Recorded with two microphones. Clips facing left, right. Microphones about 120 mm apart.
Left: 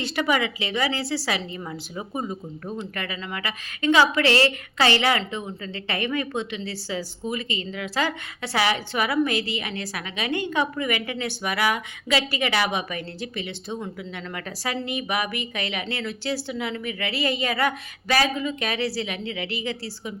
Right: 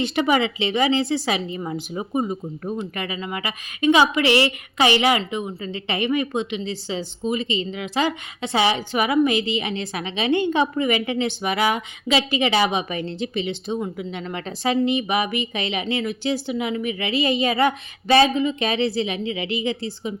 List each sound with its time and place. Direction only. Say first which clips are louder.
0.0 s a woman's voice: right 4 dB; 20° right (ahead or behind)